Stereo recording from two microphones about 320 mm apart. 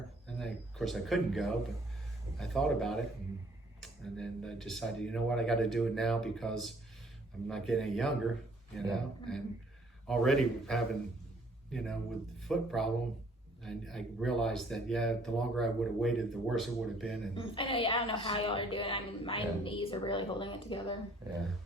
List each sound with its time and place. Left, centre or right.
0.3 s speech: centre
17.3 s a woman's voice: centre